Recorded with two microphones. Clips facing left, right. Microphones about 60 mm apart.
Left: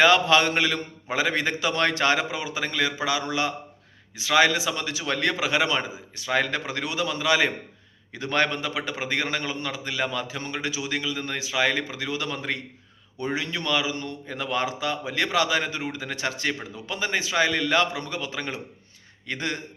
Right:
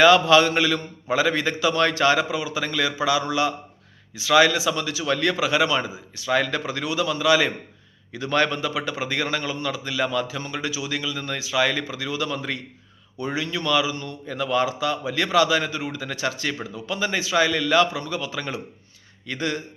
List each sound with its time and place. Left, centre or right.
0.0 s a man's voice: left
10.4 s a man's voice: left